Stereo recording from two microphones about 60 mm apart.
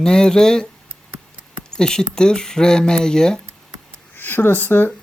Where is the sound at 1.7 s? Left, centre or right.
Centre.